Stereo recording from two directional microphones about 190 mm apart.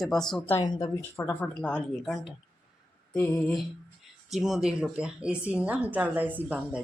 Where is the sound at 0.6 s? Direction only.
20° left (ahead or behind).